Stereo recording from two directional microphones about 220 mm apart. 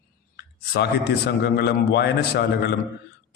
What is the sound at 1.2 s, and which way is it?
A man's voice, 45° left (ahead or behind).